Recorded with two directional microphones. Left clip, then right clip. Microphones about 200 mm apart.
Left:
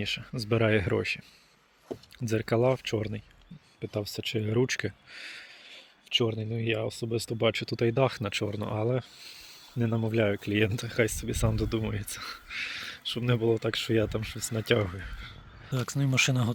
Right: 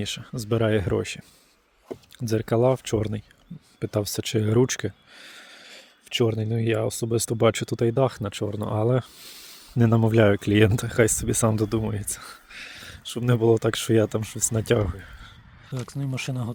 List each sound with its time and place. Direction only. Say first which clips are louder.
0.0 s speech: right 1 dB; 30° right (ahead or behind)
3.8 s speech: right 7 dB; 55° right (ahead or behind); by 5.5 s 30° right (ahead or behind)
5.5 s speech: right 3 dB; 45° right (ahead or behind)
7.9 s speech: right 3 dB; 35° right (ahead or behind)
11.8 s speech: right 4 dB; 35° right (ahead or behind)
14.8 s speech: right 1 dB; 30° right (ahead or behind)
15.7 s speech: left 5 dB; centre (ahead or behind)